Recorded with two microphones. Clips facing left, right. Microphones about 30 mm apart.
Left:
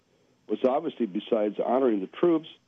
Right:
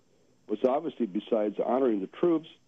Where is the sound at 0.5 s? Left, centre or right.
Centre.